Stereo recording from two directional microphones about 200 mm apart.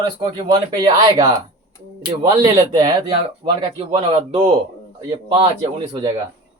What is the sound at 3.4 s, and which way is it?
Speech, 30° right (ahead or behind).